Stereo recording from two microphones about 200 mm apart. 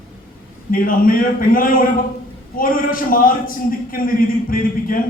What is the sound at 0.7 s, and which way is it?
A man's voice, 45° left (ahead or behind).